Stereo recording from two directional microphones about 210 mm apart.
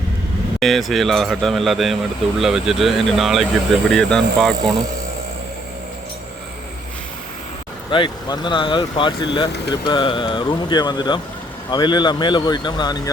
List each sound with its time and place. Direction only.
0.6 s speech: centre (ahead or behind)
7.9 s speech: 25° left (ahead or behind)